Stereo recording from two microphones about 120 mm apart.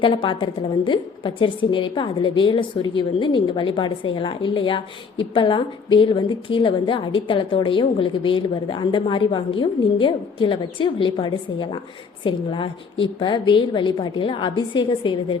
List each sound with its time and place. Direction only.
0.0 s a woman's voice: 45° left (ahead or behind)